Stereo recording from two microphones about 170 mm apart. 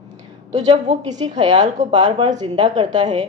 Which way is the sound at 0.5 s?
25° right (ahead or behind).